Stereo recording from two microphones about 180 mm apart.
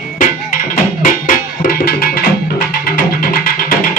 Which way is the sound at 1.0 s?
50° left (ahead or behind).